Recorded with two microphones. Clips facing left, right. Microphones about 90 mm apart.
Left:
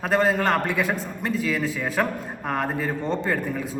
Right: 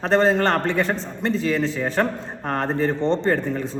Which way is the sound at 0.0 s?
10° left (ahead or behind).